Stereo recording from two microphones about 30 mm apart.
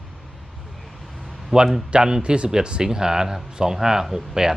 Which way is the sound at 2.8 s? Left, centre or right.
Centre.